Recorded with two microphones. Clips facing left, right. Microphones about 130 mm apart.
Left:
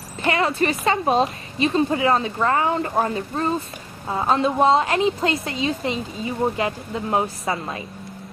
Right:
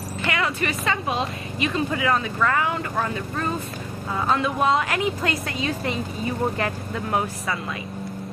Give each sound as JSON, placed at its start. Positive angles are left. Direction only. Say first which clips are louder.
{"t": 0.2, "sound": "a woman's voice", "louder": "left 5 dB", "side_deg": 30}